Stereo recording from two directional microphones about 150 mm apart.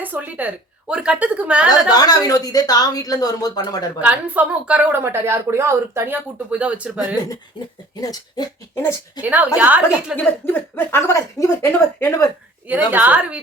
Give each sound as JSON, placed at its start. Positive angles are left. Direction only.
{"t": 0.0, "sound": "a woman's voice", "side_deg": -10}
{"t": 1.7, "sound": "speech", "side_deg": 25}
{"t": 4.0, "sound": "a woman's voice", "side_deg": -10}
{"t": 8.0, "sound": "speech", "side_deg": 25}
{"t": 9.2, "sound": "a woman's voice", "side_deg": -10}
{"t": 10.2, "sound": "speech", "side_deg": 15}
{"t": 12.6, "sound": "a woman's voice", "side_deg": -10}